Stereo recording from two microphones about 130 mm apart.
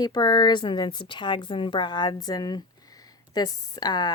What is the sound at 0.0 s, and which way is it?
A woman's voice, 35° left (ahead or behind).